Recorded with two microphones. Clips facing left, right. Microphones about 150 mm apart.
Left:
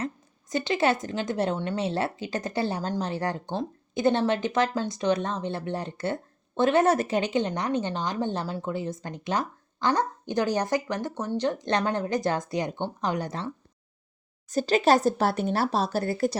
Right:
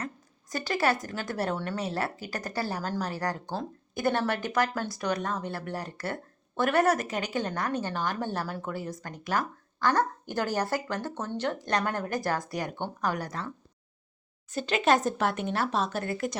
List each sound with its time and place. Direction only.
0.5 s a woman's voice: 20° left (ahead or behind)
14.5 s speech: 35° left (ahead or behind)